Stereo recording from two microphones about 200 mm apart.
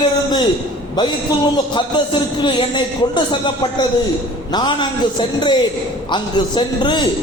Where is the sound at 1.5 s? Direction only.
25° left (ahead or behind).